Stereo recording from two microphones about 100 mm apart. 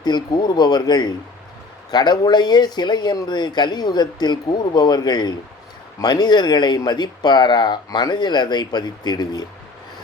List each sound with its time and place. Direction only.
0.0 s speech: 45° left (ahead or behind)